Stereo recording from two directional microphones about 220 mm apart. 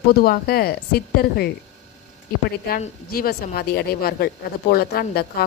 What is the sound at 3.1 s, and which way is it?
A woman's voice, 45° left (ahead or behind).